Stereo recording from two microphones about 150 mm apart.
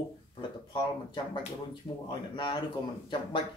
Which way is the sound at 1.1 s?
30° left (ahead or behind).